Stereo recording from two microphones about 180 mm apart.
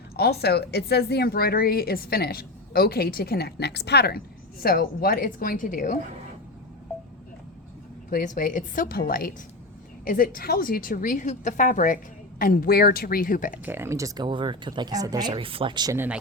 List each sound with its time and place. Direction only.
0.2 s a woman's voice: 65° left (ahead or behind); by 6.0 s 50° left (ahead or behind)
8.1 s a woman's voice: 50° left (ahead or behind)
13.7 s speech: 15° right (ahead or behind)
15.3 s speech: 30° right (ahead or behind)
16.0 s speech: 5° right (ahead or behind)